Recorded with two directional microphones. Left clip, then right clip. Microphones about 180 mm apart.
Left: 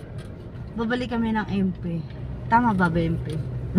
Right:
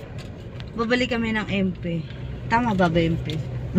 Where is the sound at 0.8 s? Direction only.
5° right (ahead or behind).